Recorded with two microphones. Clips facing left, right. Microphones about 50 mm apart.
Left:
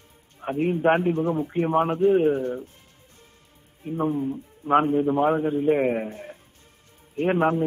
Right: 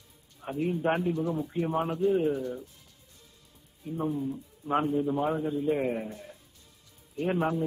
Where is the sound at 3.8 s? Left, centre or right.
Left.